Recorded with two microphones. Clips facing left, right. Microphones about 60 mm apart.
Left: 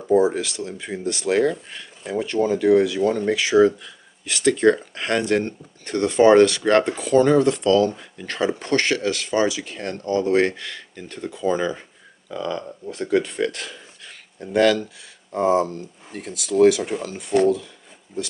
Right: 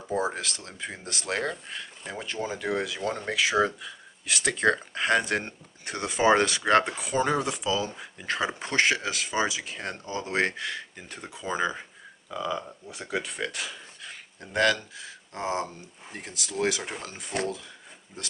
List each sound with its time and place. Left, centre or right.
0.1 s speech: centre